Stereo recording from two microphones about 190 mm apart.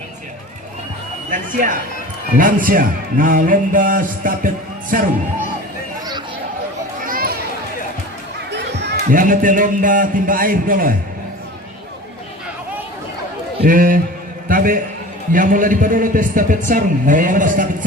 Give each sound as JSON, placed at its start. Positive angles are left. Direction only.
{"t": 1.3, "sound": "speech", "side_deg": -45}
{"t": 7.0, "sound": "children playing", "side_deg": -50}
{"t": 8.4, "sound": "music", "side_deg": -65}
{"t": 9.0, "sound": "speech", "side_deg": -45}
{"t": 13.7, "sound": "a man's voice", "side_deg": -45}